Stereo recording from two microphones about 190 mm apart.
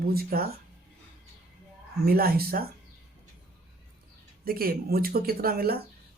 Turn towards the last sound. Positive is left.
turn(degrees=-55)  # may be behind; listen again after turning